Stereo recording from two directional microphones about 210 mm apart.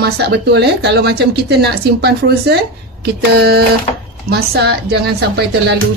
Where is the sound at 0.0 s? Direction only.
50° right (ahead or behind).